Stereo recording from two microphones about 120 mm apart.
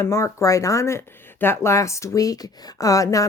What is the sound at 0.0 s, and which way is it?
Speech, 25° left (ahead or behind).